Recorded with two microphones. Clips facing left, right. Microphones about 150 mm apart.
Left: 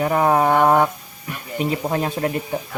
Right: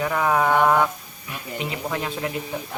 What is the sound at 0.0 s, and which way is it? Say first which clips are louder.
Speech: left 4 dB; 40° left (ahead or behind).